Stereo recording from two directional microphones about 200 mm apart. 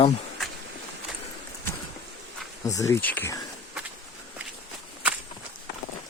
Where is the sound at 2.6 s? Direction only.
15° left (ahead or behind).